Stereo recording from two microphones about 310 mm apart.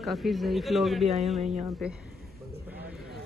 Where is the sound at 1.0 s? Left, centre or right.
Centre.